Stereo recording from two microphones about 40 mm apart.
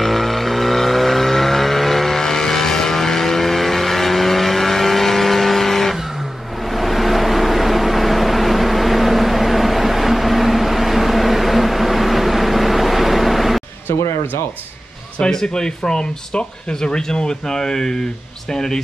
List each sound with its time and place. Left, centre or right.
0.0 s vehicle: centre
15.3 s speech: centre